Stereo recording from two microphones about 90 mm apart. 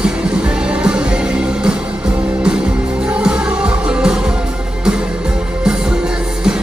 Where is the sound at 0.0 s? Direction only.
10° right (ahead or behind).